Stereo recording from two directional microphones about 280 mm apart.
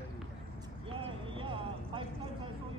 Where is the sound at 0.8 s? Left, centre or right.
Centre.